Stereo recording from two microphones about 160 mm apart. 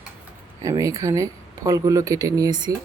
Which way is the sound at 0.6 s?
20° right (ahead or behind).